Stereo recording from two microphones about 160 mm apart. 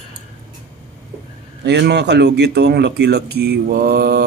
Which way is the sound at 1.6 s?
90° right.